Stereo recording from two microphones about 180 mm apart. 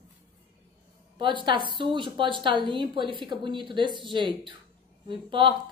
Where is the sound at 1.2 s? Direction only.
25° right (ahead or behind).